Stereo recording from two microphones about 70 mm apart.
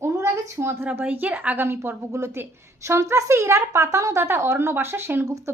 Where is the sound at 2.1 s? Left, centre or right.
Right.